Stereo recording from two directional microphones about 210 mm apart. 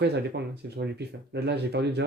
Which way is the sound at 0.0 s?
50° right (ahead or behind).